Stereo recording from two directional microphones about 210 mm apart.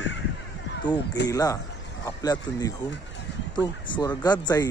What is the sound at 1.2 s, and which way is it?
A man's voice, 15° left (ahead or behind).